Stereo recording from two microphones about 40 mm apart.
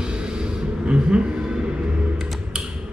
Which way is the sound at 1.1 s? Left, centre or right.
Right.